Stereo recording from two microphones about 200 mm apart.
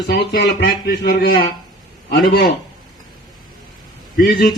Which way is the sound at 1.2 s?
45° left (ahead or behind).